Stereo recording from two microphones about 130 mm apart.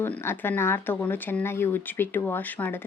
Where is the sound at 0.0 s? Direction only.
15° left (ahead or behind).